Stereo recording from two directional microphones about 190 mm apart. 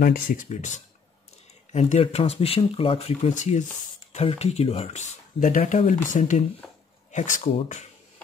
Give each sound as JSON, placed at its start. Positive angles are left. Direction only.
{"t": 0.0, "sound": "speech", "side_deg": 45}
{"t": 1.7, "sound": "speech", "side_deg": 35}